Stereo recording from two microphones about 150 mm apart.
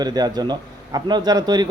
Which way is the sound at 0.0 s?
25° right (ahead or behind).